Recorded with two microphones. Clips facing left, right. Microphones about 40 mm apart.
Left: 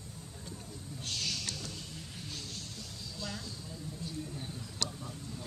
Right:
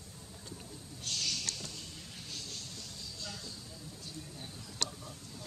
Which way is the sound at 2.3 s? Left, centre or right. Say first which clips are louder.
Even; centre.